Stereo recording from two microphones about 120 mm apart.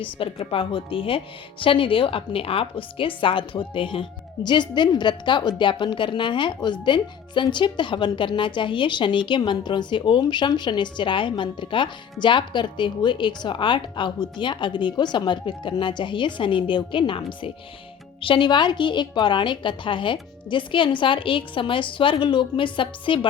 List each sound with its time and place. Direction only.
0.0 s a woman's voice: 50° left (ahead or behind)